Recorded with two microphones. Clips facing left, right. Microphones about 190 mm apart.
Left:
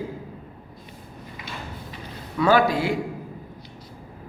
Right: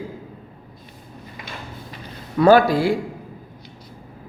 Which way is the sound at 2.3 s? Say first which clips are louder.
Right 5 dB; 40° right (ahead or behind).